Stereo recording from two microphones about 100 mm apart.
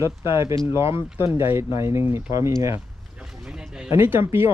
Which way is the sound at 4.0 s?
20° right (ahead or behind).